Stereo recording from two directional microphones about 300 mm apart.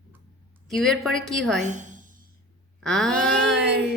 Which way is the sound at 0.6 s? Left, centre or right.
Centre.